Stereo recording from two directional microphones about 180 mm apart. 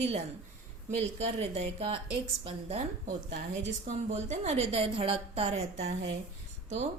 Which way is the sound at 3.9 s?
40° right (ahead or behind).